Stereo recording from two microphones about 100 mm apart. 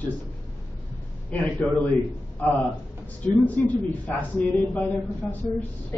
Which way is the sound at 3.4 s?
15° left (ahead or behind).